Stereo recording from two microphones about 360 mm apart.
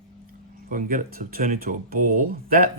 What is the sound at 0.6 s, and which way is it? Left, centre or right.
Speech, right.